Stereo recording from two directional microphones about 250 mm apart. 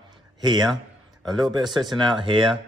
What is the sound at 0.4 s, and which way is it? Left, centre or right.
A man's voice, centre.